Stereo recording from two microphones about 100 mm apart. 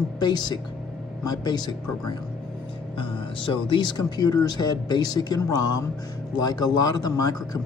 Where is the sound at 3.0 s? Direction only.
60° left (ahead or behind).